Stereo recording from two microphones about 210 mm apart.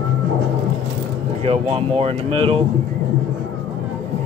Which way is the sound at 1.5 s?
30° right (ahead or behind).